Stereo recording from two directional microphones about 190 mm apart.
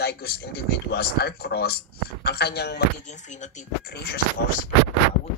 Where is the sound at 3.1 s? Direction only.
40° left (ahead or behind).